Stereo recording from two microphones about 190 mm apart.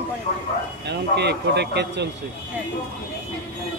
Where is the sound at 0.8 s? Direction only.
60° right (ahead or behind).